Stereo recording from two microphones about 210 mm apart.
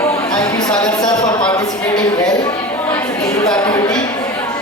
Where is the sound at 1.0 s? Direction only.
20° left (ahead or behind).